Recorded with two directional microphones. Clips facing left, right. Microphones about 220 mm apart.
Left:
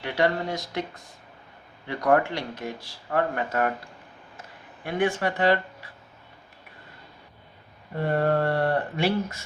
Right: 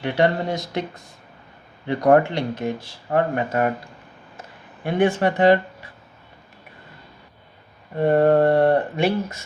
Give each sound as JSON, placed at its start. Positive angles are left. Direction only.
{"t": 0.0, "sound": "speech", "side_deg": -25}
{"t": 1.9, "sound": "speech", "side_deg": -25}
{"t": 4.8, "sound": "speech", "side_deg": -25}
{"t": 8.0, "sound": "speech", "side_deg": -20}